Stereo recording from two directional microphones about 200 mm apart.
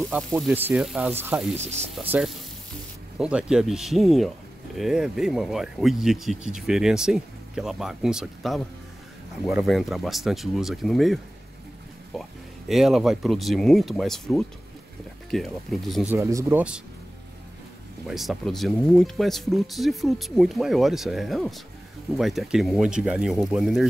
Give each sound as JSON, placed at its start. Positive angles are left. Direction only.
{"t": 0.5, "sound": "speech", "side_deg": -5}
{"t": 12.2, "sound": "speech", "side_deg": 0}
{"t": 16.1, "sound": "speech", "side_deg": -15}
{"t": 18.0, "sound": "speech", "side_deg": 0}